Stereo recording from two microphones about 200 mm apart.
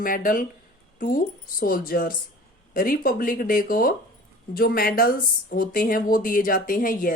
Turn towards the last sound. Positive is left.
turn(degrees=45)  # may be behind; listen again after turning